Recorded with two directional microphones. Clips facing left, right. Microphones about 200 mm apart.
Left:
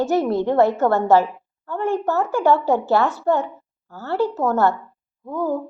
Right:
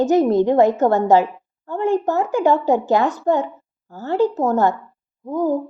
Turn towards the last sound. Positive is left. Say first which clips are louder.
# right 4 dB
turn(degrees=-15)  # may be behind; listen again after turning